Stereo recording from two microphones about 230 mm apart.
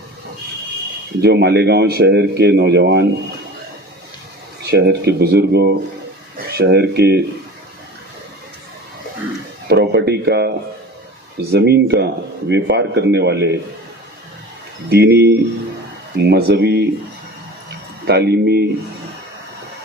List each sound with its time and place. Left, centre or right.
1.2 s speech: right
4.6 s speech: right
9.6 s speech: right
11.5 s speech: right
14.8 s speech: right
18.0 s speech: right